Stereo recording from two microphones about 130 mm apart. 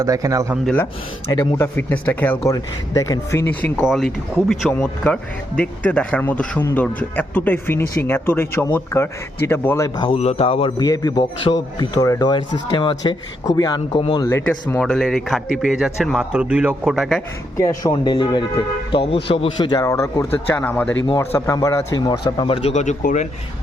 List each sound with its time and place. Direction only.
0.0 s speech: 25° right (ahead or behind)
1.3 s speech: 30° left (ahead or behind)
2.5 s a man's voice: 25° left (ahead or behind)
3.8 s speech: centre (ahead or behind)
4.7 s speech: 15° left (ahead or behind)
10.0 s a man's voice: 50° left (ahead or behind)
10.8 s a man's voice: 30° left (ahead or behind)
14.3 s speech: 20° left (ahead or behind); by 17.2 s centre (ahead or behind)
17.6 s a man's voice: 25° left (ahead or behind); by 22.7 s 45° left (ahead or behind)
22.7 s speech: 65° left (ahead or behind)